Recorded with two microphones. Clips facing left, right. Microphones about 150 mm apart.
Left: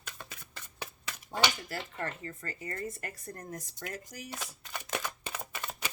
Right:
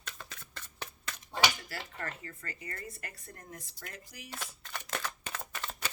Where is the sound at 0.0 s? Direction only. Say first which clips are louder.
Even; 10° left (ahead or behind).